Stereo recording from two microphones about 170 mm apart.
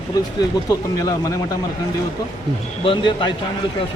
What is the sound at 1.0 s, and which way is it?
Speech, 20° left (ahead or behind).